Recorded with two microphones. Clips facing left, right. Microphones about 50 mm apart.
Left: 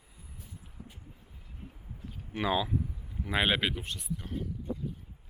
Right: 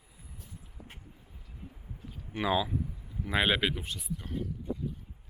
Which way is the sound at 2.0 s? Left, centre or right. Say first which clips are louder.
Even; centre.